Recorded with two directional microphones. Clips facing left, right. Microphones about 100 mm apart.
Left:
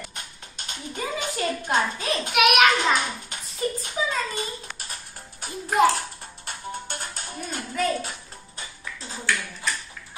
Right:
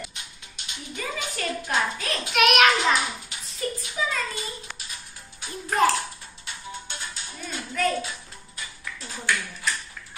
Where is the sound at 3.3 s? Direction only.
50° left (ahead or behind).